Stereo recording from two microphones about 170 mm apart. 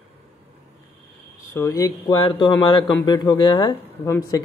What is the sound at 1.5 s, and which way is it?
A man's voice, 15° left (ahead or behind).